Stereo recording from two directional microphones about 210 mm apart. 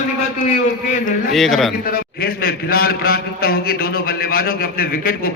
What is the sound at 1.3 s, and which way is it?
Speech, centre (ahead or behind).